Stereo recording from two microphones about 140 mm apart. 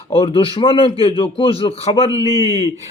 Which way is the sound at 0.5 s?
35° left (ahead or behind).